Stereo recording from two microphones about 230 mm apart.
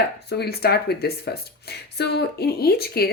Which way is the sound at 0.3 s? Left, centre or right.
Left.